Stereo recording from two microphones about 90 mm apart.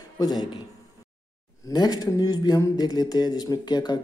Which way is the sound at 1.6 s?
50° left (ahead or behind).